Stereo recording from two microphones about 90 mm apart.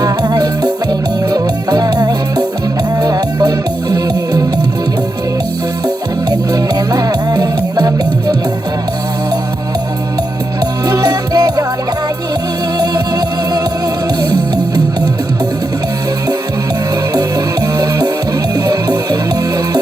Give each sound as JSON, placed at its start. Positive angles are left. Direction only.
{"t": 0.0, "sound": "music", "side_deg": -45}
{"t": 6.3, "sound": "music", "side_deg": -45}
{"t": 10.6, "sound": "music", "side_deg": -45}
{"t": 12.7, "sound": "music", "side_deg": -45}
{"t": 17.2, "sound": "music", "side_deg": -45}